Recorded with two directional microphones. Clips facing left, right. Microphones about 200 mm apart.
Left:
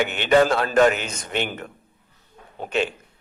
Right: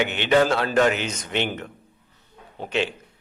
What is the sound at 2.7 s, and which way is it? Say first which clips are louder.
Speech: left 1 dB; 45° left (ahead or behind).